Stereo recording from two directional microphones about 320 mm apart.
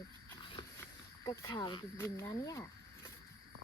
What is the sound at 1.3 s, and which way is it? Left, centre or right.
Speech, centre.